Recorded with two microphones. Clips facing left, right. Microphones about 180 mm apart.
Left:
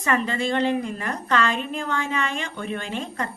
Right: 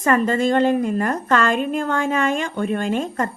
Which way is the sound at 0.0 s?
45° right (ahead or behind).